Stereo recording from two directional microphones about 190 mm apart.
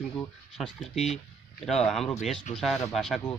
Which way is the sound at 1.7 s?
Centre (ahead or behind).